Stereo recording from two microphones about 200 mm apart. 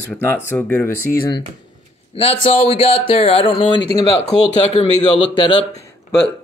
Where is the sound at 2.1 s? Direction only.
30° left (ahead or behind).